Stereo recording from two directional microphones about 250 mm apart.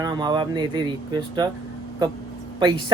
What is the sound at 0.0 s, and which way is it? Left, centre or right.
Speech, centre.